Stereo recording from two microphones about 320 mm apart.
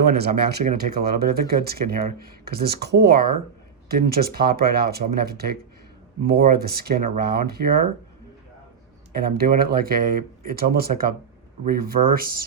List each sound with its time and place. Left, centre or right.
0.6 s speech: right
9.2 s speech: right